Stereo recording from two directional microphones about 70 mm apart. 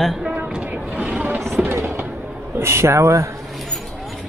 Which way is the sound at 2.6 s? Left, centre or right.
Right.